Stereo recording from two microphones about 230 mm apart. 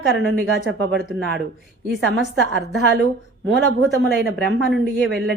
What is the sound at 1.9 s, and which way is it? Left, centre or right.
A woman's voice, right.